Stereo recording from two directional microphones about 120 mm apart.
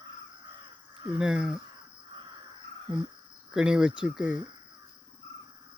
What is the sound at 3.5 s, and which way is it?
Speech, 5° right (ahead or behind).